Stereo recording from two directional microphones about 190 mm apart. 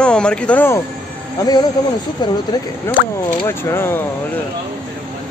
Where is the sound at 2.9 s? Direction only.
10° left (ahead or behind).